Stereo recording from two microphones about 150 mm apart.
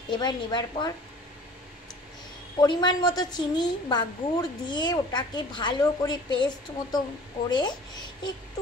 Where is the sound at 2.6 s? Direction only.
30° left (ahead or behind).